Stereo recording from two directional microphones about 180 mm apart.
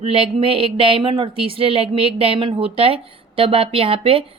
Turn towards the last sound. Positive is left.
turn(degrees=-30)  # may be behind; listen again after turning